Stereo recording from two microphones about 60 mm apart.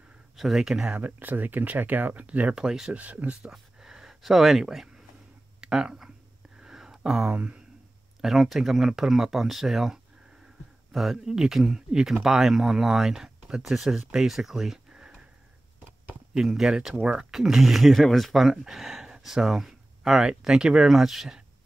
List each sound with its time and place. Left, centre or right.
0.4 s speech: centre
0.9 s speech: right
2.5 s speech: centre
2.9 s speech: right
3.5 s a sound: centre
5.6 s speech: centre
6.6 s a sound: centre
7.3 s speech: right
8.2 s speech: centre
16.3 s speech: centre
17.0 s speech: centre
17.3 s speech: centre